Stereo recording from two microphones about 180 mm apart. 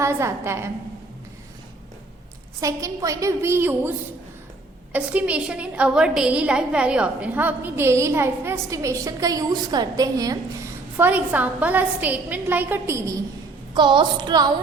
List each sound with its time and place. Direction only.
0.0 s a woman's voice: 15° right (ahead or behind)
2.6 s a woman's voice: 20° right (ahead or behind)
13.7 s a woman's voice: 25° right (ahead or behind)